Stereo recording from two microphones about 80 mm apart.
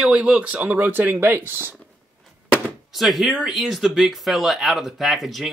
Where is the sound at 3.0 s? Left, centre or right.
Centre.